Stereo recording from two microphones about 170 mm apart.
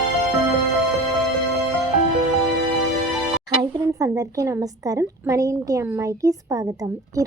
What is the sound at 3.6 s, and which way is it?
A woman's voice, 20° right (ahead or behind).